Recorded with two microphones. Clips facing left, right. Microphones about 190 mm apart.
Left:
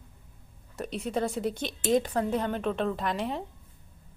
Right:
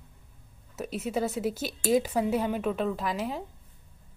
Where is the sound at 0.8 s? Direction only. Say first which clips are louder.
Even; 5° right (ahead or behind).